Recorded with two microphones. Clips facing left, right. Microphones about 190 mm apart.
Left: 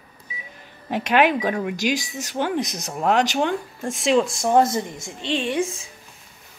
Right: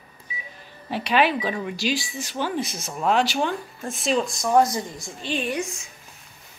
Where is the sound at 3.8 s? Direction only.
90° left.